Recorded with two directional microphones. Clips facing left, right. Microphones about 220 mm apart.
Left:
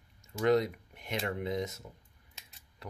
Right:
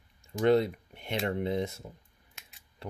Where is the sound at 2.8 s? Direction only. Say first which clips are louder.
Right 5 dB; 30° right (ahead or behind).